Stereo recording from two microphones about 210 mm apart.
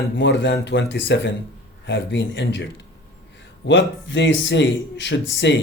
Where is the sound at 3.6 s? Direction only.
60° left (ahead or behind).